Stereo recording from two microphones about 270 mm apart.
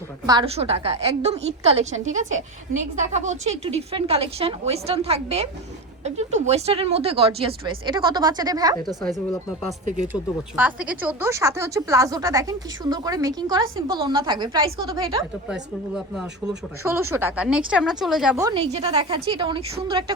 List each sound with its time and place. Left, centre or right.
0.3 s a woman's voice: centre
8.9 s speech: centre